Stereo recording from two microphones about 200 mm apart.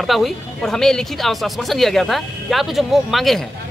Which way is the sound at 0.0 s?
Centre (ahead or behind).